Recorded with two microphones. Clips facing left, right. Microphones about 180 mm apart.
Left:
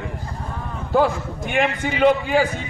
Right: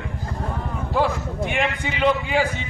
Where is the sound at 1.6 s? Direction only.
45° left (ahead or behind).